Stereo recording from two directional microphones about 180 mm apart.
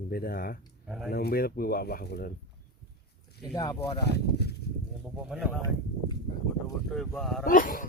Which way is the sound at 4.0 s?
65° left (ahead or behind).